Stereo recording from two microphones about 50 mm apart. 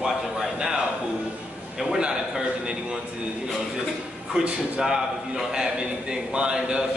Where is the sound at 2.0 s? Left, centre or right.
Centre.